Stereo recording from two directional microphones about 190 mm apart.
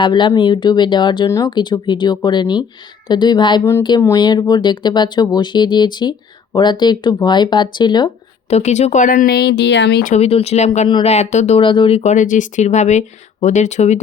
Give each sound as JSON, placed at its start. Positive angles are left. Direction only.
{"t": 0.0, "sound": "speech", "side_deg": 25}
{"t": 10.0, "sound": "speech", "side_deg": 40}